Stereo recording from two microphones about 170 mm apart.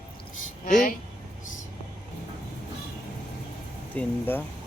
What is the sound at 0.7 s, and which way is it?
Speech, 55° left (ahead or behind).